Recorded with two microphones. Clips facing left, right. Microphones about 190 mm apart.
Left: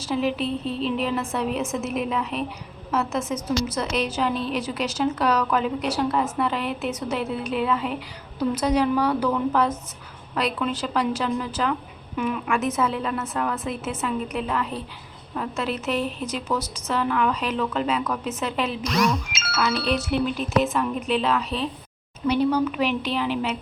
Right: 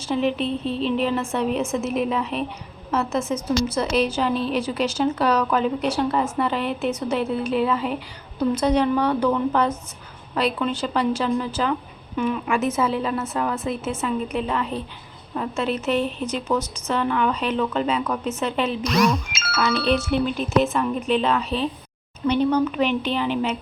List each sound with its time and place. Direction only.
0.0 s a woman's voice: centre (ahead or behind)
16.5 s a woman's voice: 20° right (ahead or behind)
16.8 s a woman's voice: centre (ahead or behind)